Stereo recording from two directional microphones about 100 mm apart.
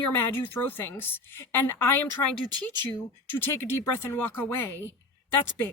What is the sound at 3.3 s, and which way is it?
A woman's voice, 20° left (ahead or behind).